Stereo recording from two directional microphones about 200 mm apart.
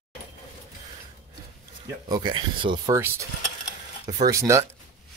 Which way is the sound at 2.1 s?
25° right (ahead or behind).